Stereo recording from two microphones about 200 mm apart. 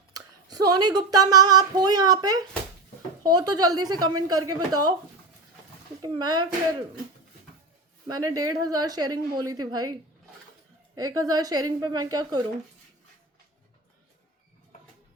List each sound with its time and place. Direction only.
0.1 s a woman's voice: 20° right (ahead or behind)
6.0 s a woman's voice: 20° right (ahead or behind)
8.0 s a woman's voice: 20° right (ahead or behind)
10.9 s a woman's voice: 20° right (ahead or behind)